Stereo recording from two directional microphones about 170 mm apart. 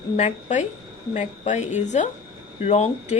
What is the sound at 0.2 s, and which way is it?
Speech, 40° left (ahead or behind).